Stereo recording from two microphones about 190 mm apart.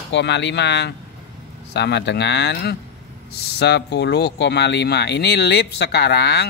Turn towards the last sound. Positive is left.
turn(degrees=60)  # may be behind; listen again after turning